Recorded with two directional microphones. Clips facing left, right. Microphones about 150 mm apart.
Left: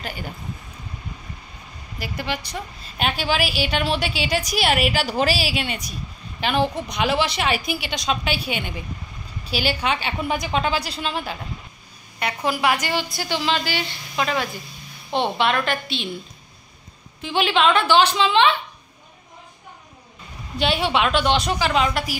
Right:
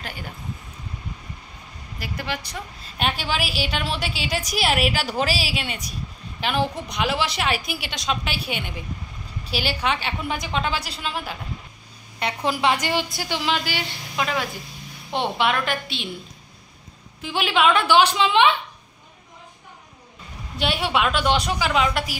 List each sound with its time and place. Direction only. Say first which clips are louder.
0.0 s a woman's voice: left 3 dB; centre (ahead or behind)
2.0 s a woman's voice: left 2 dB; centre (ahead or behind)
12.6 s a woman's voice: right 1 dB; 25° right (ahead or behind)
17.2 s a woman's voice: left 1 dB; 5° right (ahead or behind)
20.5 s a woman's voice: left 2 dB; 5° right (ahead or behind)
21.9 s a woman's voice: left 1 dB; 40° left (ahead or behind)